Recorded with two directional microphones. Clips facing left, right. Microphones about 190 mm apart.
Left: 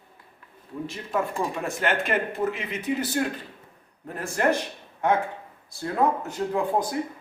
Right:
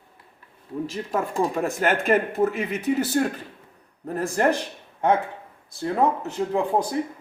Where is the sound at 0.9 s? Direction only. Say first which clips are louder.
Even; 40° right (ahead or behind).